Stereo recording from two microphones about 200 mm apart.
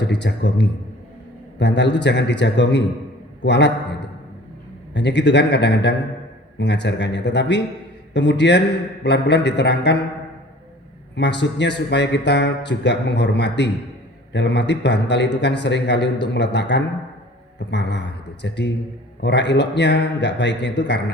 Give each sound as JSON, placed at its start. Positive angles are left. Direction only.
{"t": 0.0, "sound": "speech", "side_deg": 60}
{"t": 4.9, "sound": "speech", "side_deg": 60}
{"t": 11.1, "sound": "speech", "side_deg": 60}